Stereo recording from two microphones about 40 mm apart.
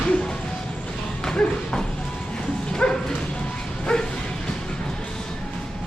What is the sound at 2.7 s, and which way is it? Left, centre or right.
Bow-wow, centre.